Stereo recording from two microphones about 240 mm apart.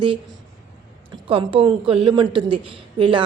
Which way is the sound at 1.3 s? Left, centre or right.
Right.